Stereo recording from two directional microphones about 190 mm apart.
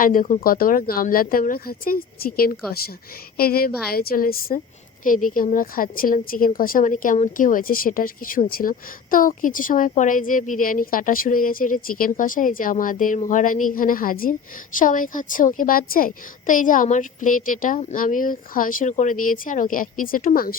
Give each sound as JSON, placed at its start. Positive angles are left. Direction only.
{"t": 0.0, "sound": "a woman's voice", "side_deg": 45}